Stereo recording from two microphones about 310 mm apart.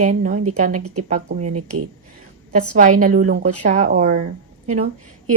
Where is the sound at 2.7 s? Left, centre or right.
Right.